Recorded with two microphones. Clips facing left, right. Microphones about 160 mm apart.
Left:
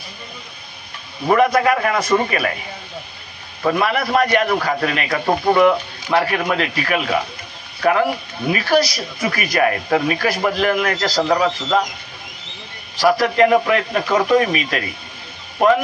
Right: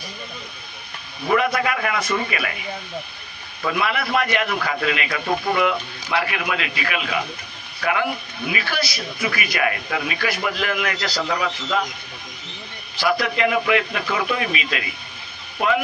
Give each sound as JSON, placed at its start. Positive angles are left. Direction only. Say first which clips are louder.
{"t": 1.3, "sound": "speech", "louder": "left 6 dB", "side_deg": 40}
{"t": 3.6, "sound": "speech", "louder": "left 5 dB", "side_deg": 40}
{"t": 13.0, "sound": "speech", "louder": "left 6 dB", "side_deg": 40}